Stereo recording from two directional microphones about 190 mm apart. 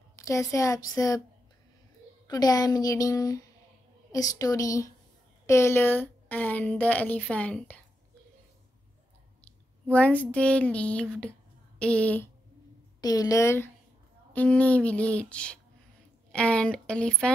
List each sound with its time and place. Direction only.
0.1 s a woman's voice: 15° left (ahead or behind)
2.2 s a woman's voice: 20° left (ahead or behind)
9.4 s a sound: 10° left (ahead or behind)
11.8 s a woman's voice: 5° left (ahead or behind)
13.0 s a woman's voice: 20° left (ahead or behind)